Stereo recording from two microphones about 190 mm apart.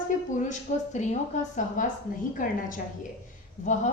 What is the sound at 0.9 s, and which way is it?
Speech, 40° left (ahead or behind).